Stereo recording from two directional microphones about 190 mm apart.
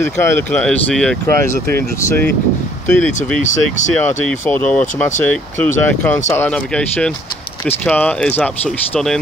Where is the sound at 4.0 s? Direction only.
10° left (ahead or behind).